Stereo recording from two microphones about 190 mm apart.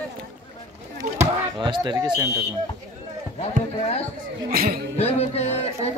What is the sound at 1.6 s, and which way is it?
Speech, 25° right (ahead or behind).